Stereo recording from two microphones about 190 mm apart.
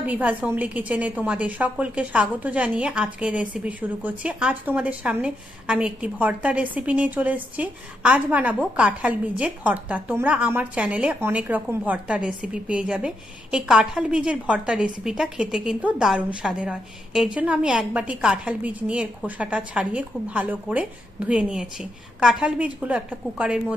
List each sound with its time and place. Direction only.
0.0 s a woman's voice: 10° right (ahead or behind)